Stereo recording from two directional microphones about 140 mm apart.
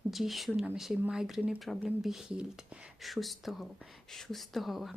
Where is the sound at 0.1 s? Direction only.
Centre (ahead or behind).